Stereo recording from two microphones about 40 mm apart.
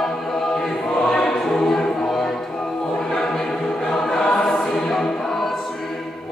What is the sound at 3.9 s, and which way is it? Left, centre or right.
Choir, centre.